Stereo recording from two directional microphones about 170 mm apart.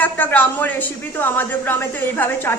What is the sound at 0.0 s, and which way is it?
A woman's voice, 10° left (ahead or behind).